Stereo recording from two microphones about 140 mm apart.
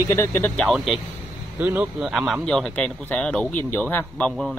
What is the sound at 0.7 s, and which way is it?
Speech, 5° right (ahead or behind).